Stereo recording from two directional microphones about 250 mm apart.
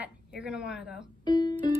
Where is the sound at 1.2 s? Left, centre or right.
Centre.